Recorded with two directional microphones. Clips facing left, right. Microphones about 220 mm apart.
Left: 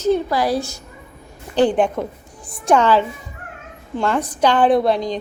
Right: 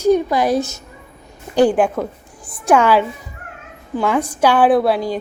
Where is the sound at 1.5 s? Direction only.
10° right (ahead or behind).